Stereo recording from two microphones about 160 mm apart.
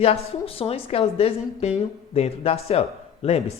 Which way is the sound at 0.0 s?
40° left (ahead or behind).